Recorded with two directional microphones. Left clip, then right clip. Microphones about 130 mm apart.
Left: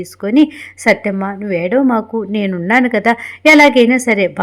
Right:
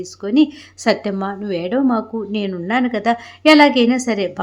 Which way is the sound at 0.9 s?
20° left (ahead or behind).